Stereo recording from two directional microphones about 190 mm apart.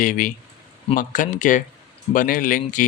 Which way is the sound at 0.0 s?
45° left (ahead or behind).